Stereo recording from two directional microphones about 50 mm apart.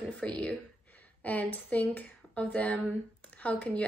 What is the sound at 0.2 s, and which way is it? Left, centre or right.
Speech, left.